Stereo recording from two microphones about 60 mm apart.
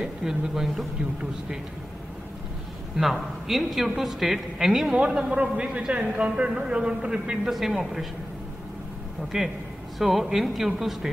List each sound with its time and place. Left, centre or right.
0.0 s a woman's voice: centre
3.0 s a woman's voice: centre
5.3 s a man's voice: right; by 8.1 s centre
9.3 s a man's voice: centre